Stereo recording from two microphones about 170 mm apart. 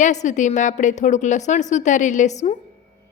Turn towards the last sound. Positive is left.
turn(degrees=45)  # may be behind; listen again after turning